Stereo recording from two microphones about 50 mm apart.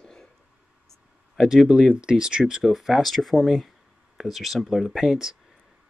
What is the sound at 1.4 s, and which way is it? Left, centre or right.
Speech, centre.